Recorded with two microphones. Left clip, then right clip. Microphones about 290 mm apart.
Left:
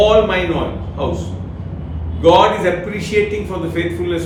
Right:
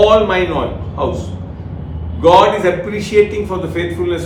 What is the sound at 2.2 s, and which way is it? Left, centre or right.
A man's voice, centre.